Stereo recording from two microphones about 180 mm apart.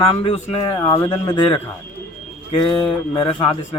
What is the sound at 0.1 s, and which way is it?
A man's voice, 30° left (ahead or behind).